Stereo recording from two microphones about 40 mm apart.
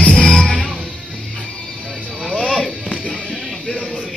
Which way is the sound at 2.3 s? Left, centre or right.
Centre.